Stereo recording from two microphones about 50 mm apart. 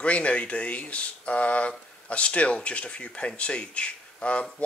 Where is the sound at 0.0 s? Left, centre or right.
Left.